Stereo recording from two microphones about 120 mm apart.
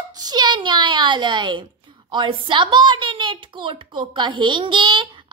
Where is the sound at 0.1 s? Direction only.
35° right (ahead or behind).